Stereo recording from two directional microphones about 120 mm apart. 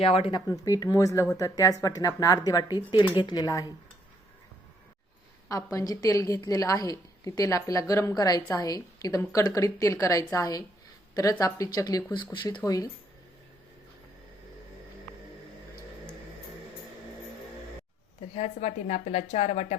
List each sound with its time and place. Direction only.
0.0 s speech: 50° left (ahead or behind)
0.3 s speech: 30° left (ahead or behind)
5.5 s a woman's voice: 30° left (ahead or behind)
12.1 s speech: 40° left (ahead or behind)
12.6 s speech: 30° left (ahead or behind)
18.3 s a woman's voice: 70° left (ahead or behind)